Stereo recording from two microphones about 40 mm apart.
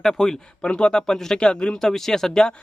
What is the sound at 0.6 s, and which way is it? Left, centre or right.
Speech, left.